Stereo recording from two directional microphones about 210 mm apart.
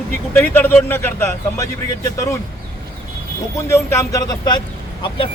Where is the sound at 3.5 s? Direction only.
15° left (ahead or behind).